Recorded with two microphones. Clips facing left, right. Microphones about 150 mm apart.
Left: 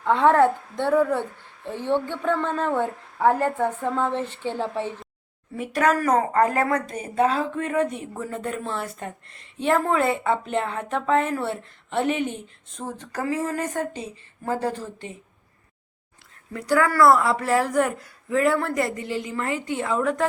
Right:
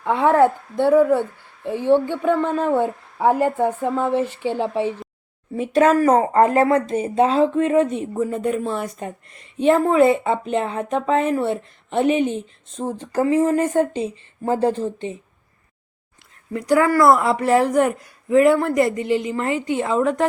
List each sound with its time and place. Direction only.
0.0 s speech: 10° right (ahead or behind)
5.5 s speech: 25° right (ahead or behind)
16.5 s speech: 20° right (ahead or behind)